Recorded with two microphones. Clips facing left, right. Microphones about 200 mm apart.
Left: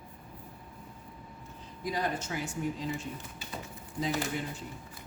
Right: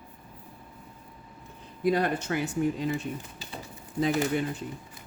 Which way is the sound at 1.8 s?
60° right (ahead or behind).